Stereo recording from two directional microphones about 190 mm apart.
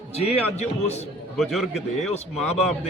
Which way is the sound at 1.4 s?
Centre (ahead or behind).